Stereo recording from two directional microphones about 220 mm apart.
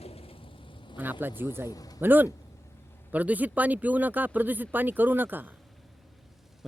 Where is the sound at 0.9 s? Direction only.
10° right (ahead or behind).